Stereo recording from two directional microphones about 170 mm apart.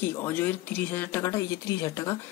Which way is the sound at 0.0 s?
15° left (ahead or behind).